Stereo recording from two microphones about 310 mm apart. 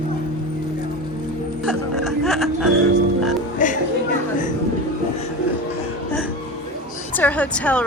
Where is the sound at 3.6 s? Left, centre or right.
Left.